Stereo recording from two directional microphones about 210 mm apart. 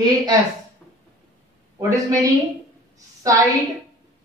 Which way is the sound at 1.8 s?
15° right (ahead or behind).